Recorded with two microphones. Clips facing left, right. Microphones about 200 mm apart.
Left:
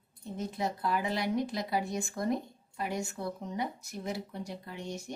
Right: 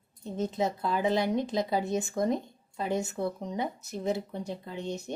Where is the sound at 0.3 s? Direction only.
20° right (ahead or behind).